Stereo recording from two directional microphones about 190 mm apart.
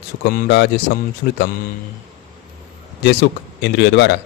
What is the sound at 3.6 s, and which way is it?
Speech, 65° left (ahead or behind).